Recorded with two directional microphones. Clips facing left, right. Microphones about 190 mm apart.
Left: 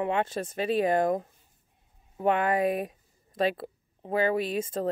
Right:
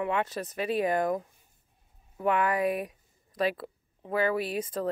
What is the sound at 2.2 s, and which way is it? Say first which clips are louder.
A child's voice: left 2 dB; 25° left (ahead or behind).